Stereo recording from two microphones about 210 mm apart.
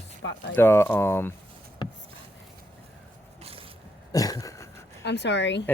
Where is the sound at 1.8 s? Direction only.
20° left (ahead or behind).